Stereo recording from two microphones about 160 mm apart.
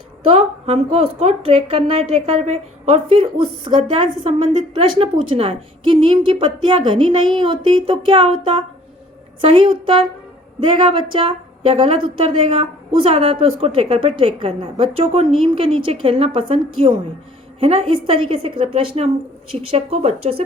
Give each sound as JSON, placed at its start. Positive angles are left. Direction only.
{"t": 0.2, "sound": "a woman's voice", "side_deg": -40}